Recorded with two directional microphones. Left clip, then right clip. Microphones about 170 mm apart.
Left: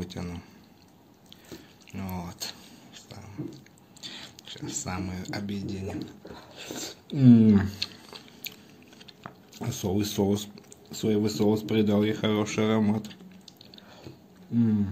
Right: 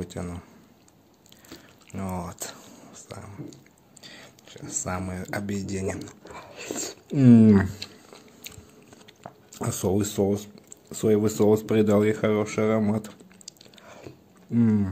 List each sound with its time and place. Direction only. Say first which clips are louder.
0.0 s speech: right 3 dB; 30° right (ahead or behind)
2.0 s a sound: right 4 dB; 35° right (ahead or behind)
4.0 s speech: left 5 dB; 20° right (ahead or behind); by 7.6 s 45° right (ahead or behind)
7.8 s chewing: left 5 dB; 20° right (ahead or behind)
9.6 s speech: right 4 dB; 50° right (ahead or behind)
10.0 s speech: right 2 dB; 30° right (ahead or behind)
10.9 s speech: right 5 dB; 50° right (ahead or behind)
12.2 s speech: right 3 dB; 25° right (ahead or behind)
12.9 s speech: right 3 dB; 40° right (ahead or behind)
14.5 s speech: right 3 dB; 45° right (ahead or behind)